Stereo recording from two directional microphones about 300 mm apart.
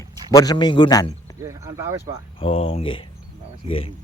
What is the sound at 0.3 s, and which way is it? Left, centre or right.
Speech, centre.